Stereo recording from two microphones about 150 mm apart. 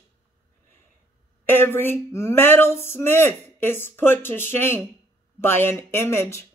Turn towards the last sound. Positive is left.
turn(degrees=15)  # may be behind; listen again after turning